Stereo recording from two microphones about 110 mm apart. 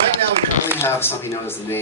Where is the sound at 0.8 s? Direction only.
20° left (ahead or behind).